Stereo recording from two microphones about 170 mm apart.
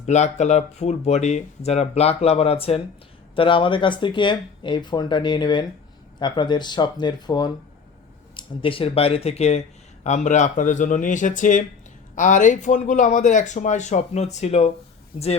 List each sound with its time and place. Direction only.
0.0 s speech: 40° left (ahead or behind)